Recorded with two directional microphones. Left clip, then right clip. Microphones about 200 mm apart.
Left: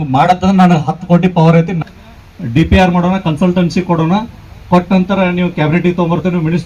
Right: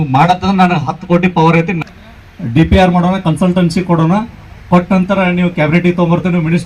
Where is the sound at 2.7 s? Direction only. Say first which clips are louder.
Even; 30° right (ahead or behind).